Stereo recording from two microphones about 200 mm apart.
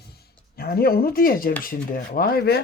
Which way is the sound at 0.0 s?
50° left (ahead or behind).